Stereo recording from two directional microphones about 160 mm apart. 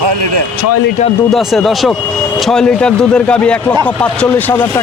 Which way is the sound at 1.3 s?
Centre (ahead or behind).